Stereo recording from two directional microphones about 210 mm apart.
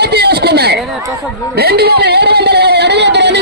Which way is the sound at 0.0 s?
50° right (ahead or behind).